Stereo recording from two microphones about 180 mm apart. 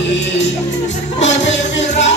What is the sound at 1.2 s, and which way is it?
Music, 85° left.